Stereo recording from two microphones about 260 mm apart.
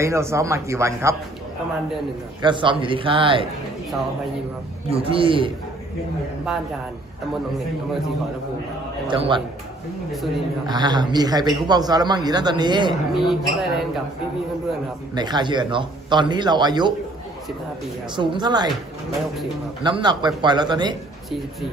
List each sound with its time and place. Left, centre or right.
0.0 s a man's voice: centre
2.4 s a man's voice: centre
4.9 s a man's voice: right
6.5 s speech: centre
9.0 s a man's voice: centre
10.7 s a man's voice: centre
12.9 s speech: centre
15.1 s a man's voice: centre
18.2 s a man's voice: centre
19.8 s a man's voice: centre